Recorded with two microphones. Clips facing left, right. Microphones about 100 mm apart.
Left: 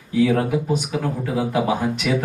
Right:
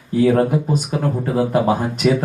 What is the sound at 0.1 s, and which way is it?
Speech, 40° right (ahead or behind).